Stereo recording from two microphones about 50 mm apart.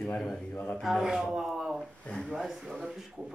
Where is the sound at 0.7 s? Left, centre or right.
Centre.